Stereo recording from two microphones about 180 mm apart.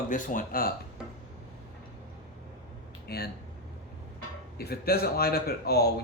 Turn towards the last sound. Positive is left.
turn(degrees=60)  # may be behind; listen again after turning